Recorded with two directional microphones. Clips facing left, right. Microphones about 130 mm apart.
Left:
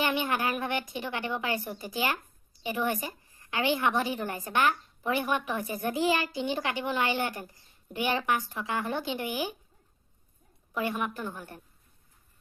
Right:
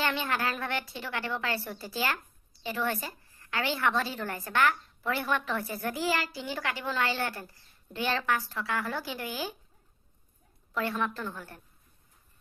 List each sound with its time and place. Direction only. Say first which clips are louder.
0.0 s a woman's voice: left 2 dB; 15° left (ahead or behind)
10.7 s a woman's voice: even; 15° left (ahead or behind)